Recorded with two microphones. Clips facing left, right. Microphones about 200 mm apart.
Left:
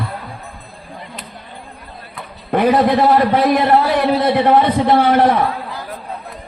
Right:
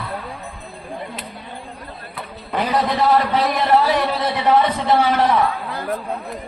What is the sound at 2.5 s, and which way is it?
A man's voice, 55° left (ahead or behind).